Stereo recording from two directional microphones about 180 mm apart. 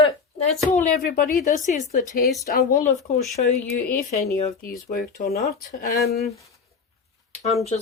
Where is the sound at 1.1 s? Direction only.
55° left (ahead or behind).